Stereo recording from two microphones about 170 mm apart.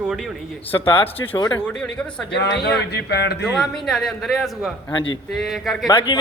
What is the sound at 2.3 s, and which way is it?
A man's voice, 85° left.